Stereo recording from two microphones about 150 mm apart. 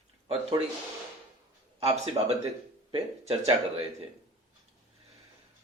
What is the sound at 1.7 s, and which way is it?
Speech, 40° right (ahead or behind).